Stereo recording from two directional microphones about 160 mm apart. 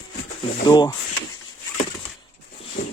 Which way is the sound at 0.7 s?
25° left (ahead or behind).